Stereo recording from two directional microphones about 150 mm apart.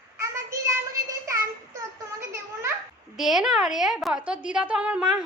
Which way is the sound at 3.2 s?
Centre (ahead or behind).